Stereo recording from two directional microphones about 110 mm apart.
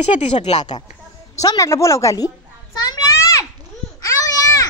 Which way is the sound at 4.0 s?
30° left (ahead or behind).